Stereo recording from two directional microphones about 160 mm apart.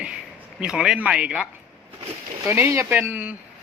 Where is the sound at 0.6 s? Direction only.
5° right (ahead or behind).